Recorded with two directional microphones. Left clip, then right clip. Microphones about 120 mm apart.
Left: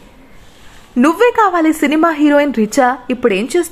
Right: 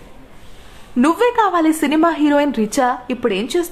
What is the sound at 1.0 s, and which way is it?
A woman's voice, 30° left (ahead or behind).